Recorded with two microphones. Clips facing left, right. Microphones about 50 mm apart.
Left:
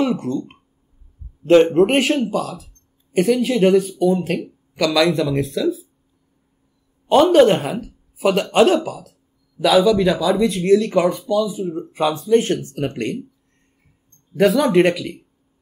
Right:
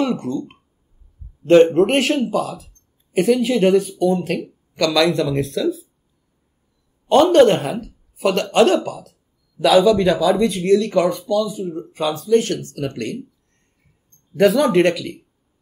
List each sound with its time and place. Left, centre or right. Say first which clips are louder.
0.0 s speech: left 1 dB; centre
1.4 s speech: right 1 dB; centre
7.1 s speech: even; centre; by 13.2 s left
14.3 s speech: even; centre